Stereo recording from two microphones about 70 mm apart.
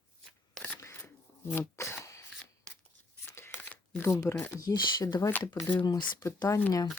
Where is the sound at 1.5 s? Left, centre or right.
Left.